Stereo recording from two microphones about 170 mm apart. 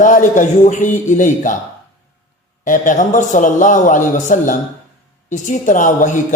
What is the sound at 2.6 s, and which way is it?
A man's voice, 50° left (ahead or behind).